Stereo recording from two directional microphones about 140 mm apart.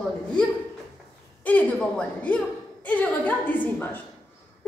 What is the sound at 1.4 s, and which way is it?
A woman's voice, 10° left (ahead or behind).